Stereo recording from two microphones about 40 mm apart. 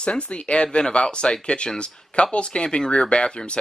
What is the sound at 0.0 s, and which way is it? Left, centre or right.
Speech, left.